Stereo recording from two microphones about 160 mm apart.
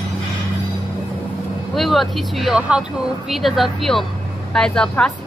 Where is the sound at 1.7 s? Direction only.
Centre (ahead or behind).